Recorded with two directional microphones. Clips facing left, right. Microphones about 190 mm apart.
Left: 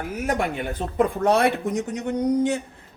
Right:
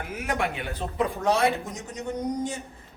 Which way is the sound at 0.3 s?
45° left (ahead or behind).